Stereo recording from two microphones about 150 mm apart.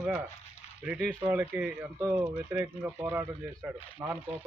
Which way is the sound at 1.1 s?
10° right (ahead or behind).